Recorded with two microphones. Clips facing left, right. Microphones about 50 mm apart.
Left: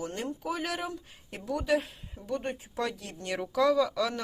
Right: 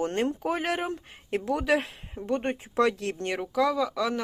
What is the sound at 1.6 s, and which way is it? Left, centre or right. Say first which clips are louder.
Speech: right 1 dB; right.